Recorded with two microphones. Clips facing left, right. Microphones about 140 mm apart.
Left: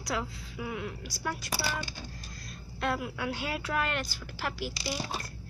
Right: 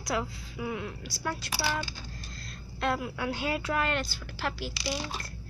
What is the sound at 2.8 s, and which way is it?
A woman's voice, 5° left (ahead or behind).